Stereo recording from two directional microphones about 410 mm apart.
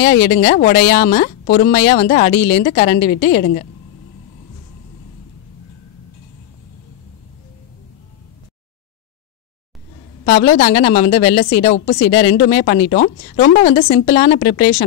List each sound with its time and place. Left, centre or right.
0.0 s a woman's voice: left
10.2 s a woman's voice: left